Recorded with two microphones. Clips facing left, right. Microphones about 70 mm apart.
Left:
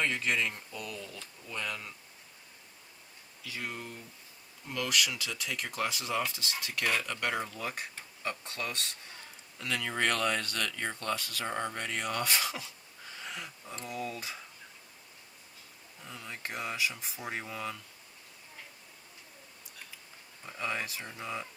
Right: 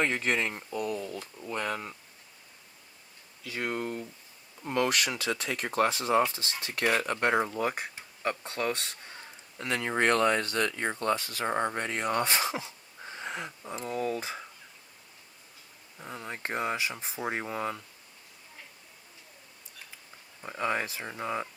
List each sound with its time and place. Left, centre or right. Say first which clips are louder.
0.0 s speech: right 3 dB; right
3.4 s speech: right 7 dB; right
16.0 s speech: right 5 dB; right
20.4 s speech: right 5 dB; right